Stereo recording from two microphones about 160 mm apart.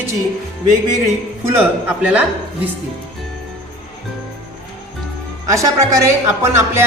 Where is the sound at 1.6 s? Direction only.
5° right (ahead or behind).